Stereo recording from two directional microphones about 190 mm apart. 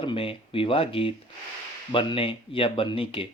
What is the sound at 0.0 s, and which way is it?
Speech, 30° left (ahead or behind).